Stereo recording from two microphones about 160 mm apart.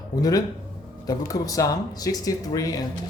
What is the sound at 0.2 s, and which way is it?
Speech, 25° left (ahead or behind).